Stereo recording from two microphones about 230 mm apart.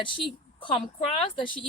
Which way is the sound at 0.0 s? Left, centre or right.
Left.